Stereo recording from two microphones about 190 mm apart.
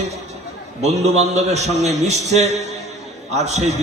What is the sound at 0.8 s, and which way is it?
A man's voice, 35° right (ahead or behind).